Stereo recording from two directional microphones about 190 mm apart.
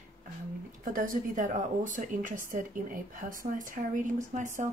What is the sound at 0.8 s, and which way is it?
Speech, 45° right (ahead or behind).